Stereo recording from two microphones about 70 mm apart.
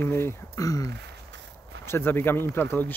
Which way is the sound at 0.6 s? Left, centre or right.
Left.